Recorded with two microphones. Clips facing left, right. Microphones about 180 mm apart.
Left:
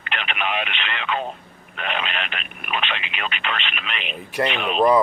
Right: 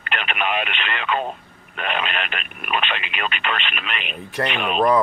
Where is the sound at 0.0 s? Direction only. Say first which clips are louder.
Right 2 dB; 45° right (ahead or behind).